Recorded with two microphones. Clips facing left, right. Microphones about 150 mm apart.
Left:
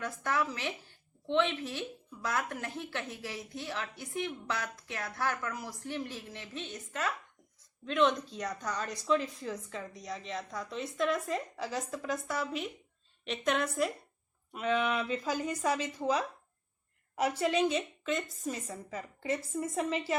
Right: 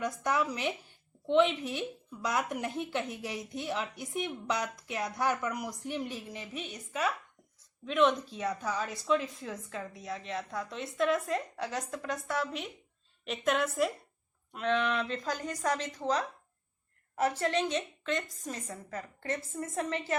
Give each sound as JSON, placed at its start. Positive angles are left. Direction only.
{"t": 0.0, "sound": "a woman's voice", "side_deg": -15}